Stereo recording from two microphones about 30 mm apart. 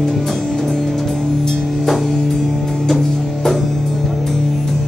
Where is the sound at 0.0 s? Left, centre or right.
Centre.